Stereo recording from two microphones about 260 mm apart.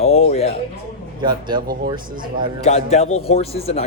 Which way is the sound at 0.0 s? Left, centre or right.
Left.